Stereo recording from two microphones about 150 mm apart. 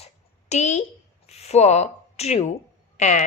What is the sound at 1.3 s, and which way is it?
A woman's voice, 45° left (ahead or behind).